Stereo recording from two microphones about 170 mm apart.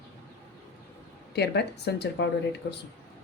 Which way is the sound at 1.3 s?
75° left (ahead or behind).